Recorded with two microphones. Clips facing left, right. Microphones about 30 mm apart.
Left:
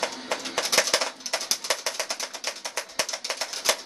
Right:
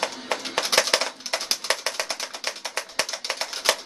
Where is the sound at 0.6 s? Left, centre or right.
Right.